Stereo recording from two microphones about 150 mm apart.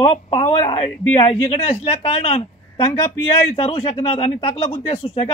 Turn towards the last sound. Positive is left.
turn(degrees=40)  # may be behind; listen again after turning